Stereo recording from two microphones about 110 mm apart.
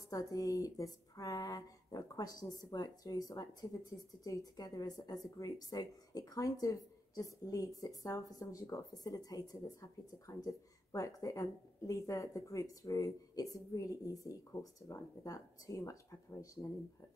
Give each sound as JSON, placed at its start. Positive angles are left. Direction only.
{"t": 0.1, "sound": "speech", "side_deg": 35}